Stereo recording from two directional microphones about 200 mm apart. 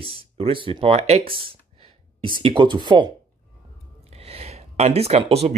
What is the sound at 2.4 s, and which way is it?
Speech, 25° right (ahead or behind).